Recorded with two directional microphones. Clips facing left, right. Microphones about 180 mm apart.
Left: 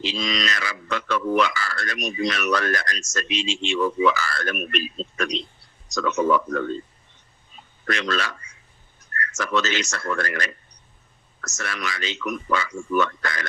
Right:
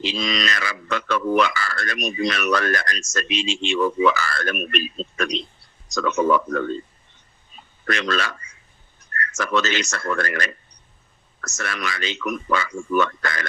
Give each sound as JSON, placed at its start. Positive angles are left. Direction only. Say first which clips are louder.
{"t": 0.0, "sound": "speech", "louder": "right 2 dB", "side_deg": -60}
{"t": 7.9, "sound": "speech", "louder": "right 2 dB", "side_deg": -60}